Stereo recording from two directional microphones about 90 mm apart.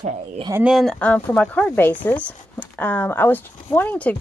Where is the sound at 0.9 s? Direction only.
15° left (ahead or behind).